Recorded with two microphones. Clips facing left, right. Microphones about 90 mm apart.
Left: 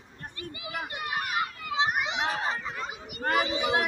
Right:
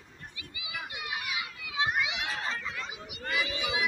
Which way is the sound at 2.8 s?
50° left (ahead or behind).